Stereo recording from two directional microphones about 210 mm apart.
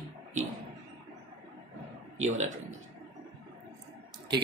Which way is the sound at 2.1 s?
35° right (ahead or behind).